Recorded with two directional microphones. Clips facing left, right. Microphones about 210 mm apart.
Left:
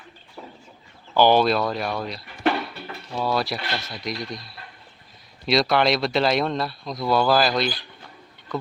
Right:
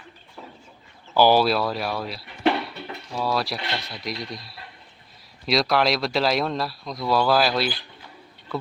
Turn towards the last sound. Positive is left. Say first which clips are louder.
# left 1 dB
turn(degrees=-5)  # may be behind; listen again after turning